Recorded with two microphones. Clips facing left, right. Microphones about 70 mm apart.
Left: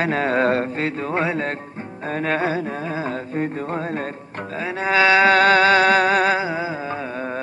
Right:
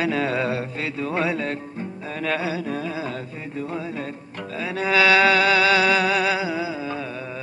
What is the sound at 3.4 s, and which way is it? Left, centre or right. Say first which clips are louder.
Music: left 7 dB; left.